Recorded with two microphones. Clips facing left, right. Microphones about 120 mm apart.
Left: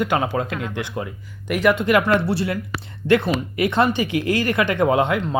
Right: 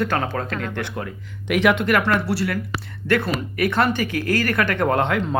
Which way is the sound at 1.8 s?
20° left (ahead or behind).